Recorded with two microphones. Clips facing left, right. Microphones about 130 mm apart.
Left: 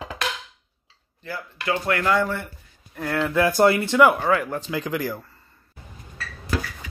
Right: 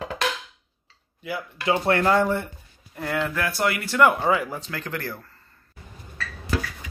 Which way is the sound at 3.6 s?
30° left (ahead or behind).